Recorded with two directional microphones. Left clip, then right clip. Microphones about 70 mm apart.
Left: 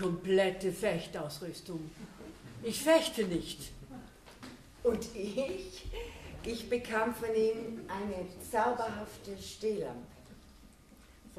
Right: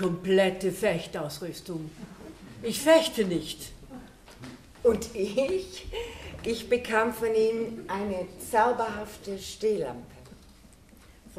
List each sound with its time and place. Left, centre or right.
0.0 s speech: right
5.1 s a woman's voice: right